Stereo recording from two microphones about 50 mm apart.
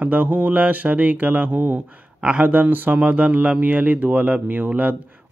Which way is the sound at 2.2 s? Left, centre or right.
Right.